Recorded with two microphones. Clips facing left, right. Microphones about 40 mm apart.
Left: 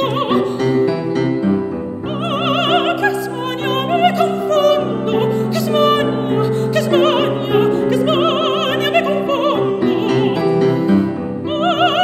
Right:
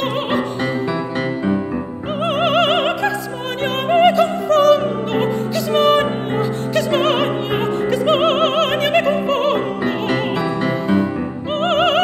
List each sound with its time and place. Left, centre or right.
2.4 s music: centre
3.9 s opera: centre
10.0 s music: right
11.5 s music: centre